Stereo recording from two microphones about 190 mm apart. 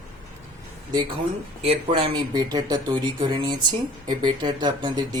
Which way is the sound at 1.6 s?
30° right (ahead or behind).